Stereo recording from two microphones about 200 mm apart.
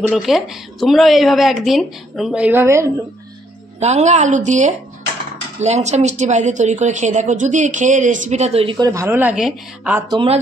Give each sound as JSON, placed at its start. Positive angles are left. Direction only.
{"t": 0.1, "sound": "a woman's voice", "side_deg": 0}
{"t": 3.8, "sound": "a woman's voice", "side_deg": -35}
{"t": 10.0, "sound": "speech", "side_deg": -25}